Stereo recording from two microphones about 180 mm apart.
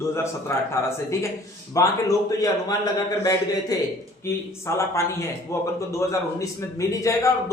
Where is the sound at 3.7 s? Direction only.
20° left (ahead or behind).